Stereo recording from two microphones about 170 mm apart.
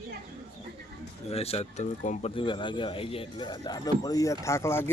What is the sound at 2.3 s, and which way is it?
Speech, 30° left (ahead or behind).